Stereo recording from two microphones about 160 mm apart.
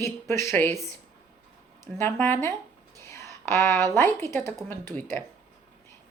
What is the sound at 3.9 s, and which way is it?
A woman's voice, 15° left (ahead or behind).